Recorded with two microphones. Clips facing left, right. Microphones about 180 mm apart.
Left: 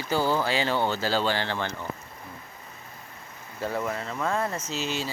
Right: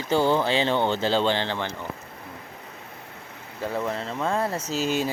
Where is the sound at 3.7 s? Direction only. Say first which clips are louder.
Right 3 dB; 25° right (ahead or behind).